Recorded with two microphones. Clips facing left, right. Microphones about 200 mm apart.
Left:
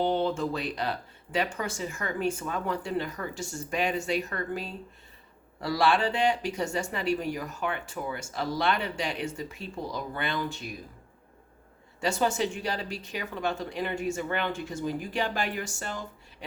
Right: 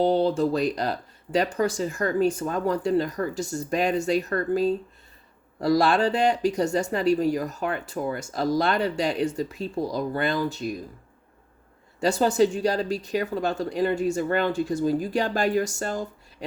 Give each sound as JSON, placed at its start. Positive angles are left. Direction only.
{"t": 0.0, "sound": "speech", "side_deg": -35}
{"t": 11.9, "sound": "speech", "side_deg": -35}